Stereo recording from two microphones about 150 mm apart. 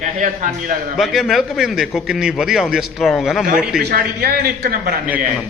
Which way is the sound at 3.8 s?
85° right.